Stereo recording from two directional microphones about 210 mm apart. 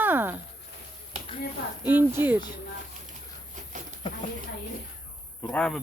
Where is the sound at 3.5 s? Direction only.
35° right (ahead or behind).